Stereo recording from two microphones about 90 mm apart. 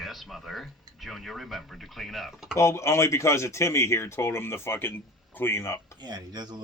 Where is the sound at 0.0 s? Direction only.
Centre (ahead or behind).